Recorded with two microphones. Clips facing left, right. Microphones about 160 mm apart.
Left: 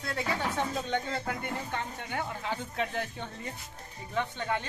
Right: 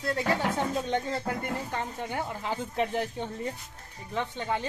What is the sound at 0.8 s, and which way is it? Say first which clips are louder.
Speech: right 3 dB; 35° right (ahead or behind).